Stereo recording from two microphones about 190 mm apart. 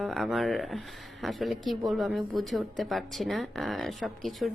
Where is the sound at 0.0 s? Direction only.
Centre (ahead or behind).